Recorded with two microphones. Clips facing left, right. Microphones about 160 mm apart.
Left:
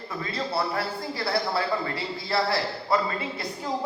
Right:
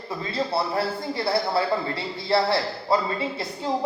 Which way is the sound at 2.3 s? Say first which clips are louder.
Right 4 dB; 30° right (ahead or behind).